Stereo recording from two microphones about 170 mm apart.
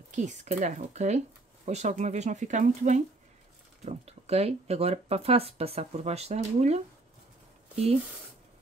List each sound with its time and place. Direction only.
0.1 s speech: 45° right (ahead or behind)